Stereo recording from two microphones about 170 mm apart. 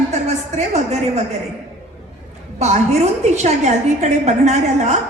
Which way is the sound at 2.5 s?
40° right (ahead or behind).